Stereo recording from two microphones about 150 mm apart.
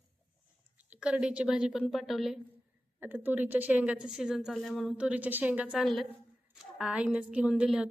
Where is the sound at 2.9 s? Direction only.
15° right (ahead or behind).